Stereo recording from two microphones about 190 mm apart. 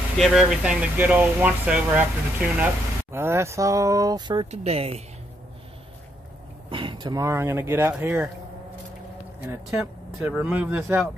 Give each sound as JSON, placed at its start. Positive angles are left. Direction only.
{"t": 0.2, "sound": "speech", "side_deg": -5}
{"t": 4.5, "sound": "a woman's voice", "side_deg": -35}
{"t": 6.7, "sound": "speech", "side_deg": -25}
{"t": 9.5, "sound": "speech", "side_deg": -10}